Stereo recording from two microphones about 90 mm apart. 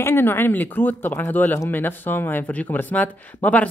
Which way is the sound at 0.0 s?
25° left (ahead or behind).